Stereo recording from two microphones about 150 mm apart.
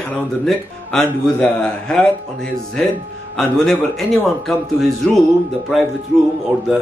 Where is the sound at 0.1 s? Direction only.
5° left (ahead or behind).